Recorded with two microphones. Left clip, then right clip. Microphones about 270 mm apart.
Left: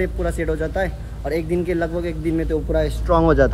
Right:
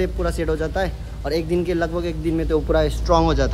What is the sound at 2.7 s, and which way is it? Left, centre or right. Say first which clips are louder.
Speech: right 2 dB; centre.